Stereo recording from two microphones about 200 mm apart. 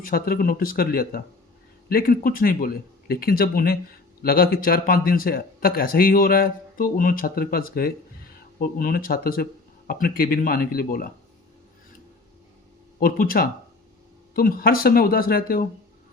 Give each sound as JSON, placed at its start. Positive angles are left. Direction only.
{"t": 0.0, "sound": "speech", "side_deg": 45}
{"t": 13.0, "sound": "speech", "side_deg": 45}